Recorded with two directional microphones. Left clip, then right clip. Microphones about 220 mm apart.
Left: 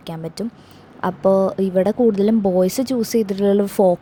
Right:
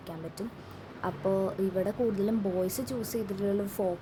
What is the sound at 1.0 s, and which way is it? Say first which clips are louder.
Speech: left 13 dB; 30° left (ahead or behind).